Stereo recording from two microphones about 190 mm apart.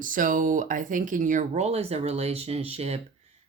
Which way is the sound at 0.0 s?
45° right (ahead or behind).